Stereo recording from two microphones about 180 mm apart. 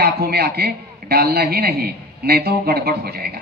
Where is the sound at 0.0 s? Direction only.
60° right (ahead or behind).